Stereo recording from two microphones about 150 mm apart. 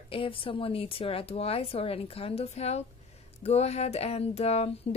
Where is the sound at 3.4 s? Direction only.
45° left (ahead or behind).